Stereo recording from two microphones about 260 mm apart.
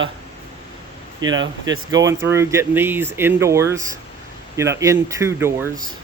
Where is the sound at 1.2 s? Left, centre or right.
Centre.